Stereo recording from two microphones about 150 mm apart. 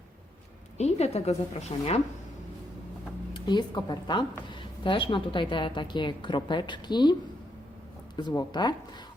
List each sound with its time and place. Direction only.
0.8 s a woman's voice: 45° left (ahead or behind)
3.3 s a woman's voice: 30° left (ahead or behind)